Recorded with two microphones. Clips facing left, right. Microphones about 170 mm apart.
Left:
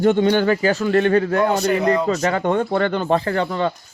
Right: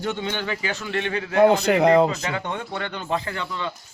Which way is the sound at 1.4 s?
65° right (ahead or behind).